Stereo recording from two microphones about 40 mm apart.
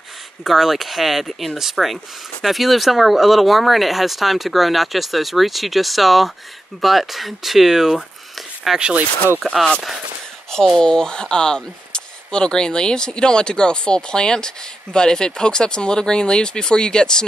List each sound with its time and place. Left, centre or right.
0.4 s speech: centre
8.7 s speech: right
10.8 s speech: centre